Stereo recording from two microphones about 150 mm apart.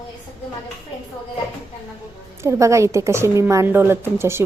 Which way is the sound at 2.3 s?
20° right (ahead or behind).